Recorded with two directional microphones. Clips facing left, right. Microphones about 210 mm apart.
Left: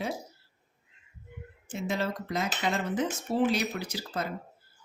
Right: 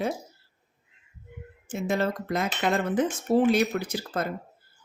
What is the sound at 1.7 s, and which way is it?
Speech, 50° right (ahead or behind).